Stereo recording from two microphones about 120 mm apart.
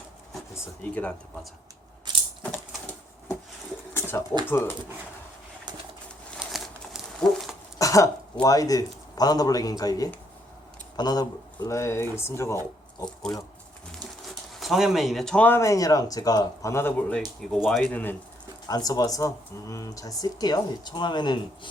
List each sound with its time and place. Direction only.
0.8 s speech: 10° left (ahead or behind)
2.1 s coin: 40° right (ahead or behind)
2.4 s a sound: 15° left (ahead or behind)
4.4 s speech: 20° left (ahead or behind)
6.4 s crumpling: 5° right (ahead or behind)
7.2 s dog: 5° left (ahead or behind)
7.8 s throat clearing: 25° left (ahead or behind)
8.4 s speech: 30° left (ahead or behind)
14.6 s a man's voice: centre (ahead or behind)
15.4 s speech: 20° left (ahead or behind)
16.7 s speech: 20° left (ahead or behind)
17.2 s speech: 5° left (ahead or behind)
17.9 s speech: 15° left (ahead or behind)
18.7 s speech: 30° left (ahead or behind)